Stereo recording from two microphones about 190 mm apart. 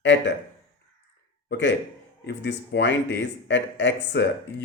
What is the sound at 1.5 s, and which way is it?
Speech, 65° left (ahead or behind).